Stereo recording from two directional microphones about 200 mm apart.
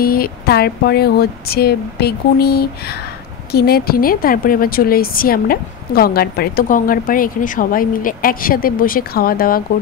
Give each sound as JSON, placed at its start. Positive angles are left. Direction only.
{"t": 0.0, "sound": "a woman's voice", "side_deg": 50}